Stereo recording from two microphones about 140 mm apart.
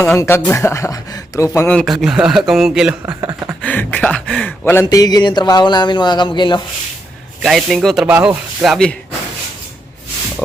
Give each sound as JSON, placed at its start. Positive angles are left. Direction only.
{"t": 0.0, "sound": "speech", "side_deg": 15}
{"t": 1.7, "sound": "speech", "side_deg": 0}
{"t": 3.1, "sound": "a sound", "side_deg": -25}
{"t": 3.6, "sound": "speech", "side_deg": 10}
{"t": 7.4, "sound": "speech", "side_deg": 0}